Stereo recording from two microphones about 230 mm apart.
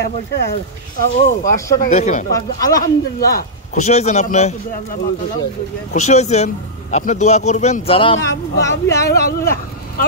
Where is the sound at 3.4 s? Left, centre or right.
Left.